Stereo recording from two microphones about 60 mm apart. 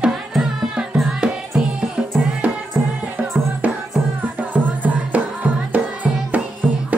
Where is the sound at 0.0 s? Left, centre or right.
Centre; by 2.6 s right.